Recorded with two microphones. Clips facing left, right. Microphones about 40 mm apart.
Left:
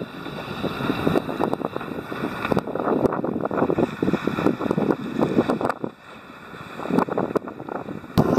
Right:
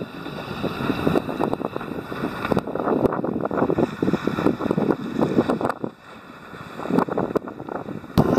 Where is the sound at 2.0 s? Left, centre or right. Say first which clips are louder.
Even; left.